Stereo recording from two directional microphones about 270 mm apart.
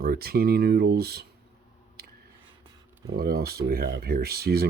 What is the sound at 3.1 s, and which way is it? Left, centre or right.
Speech, right.